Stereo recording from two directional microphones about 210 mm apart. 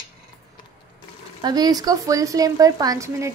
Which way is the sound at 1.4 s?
20° right (ahead or behind).